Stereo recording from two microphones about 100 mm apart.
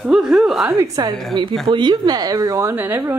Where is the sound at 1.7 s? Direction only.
50° right (ahead or behind); by 2.7 s 35° right (ahead or behind).